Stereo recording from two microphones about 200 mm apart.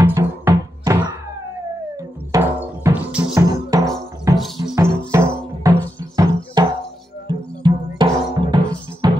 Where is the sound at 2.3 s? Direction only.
10° right (ahead or behind).